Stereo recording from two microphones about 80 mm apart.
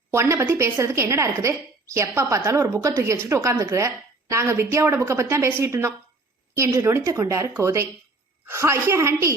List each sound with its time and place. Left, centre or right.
0.1 s a woman's voice: right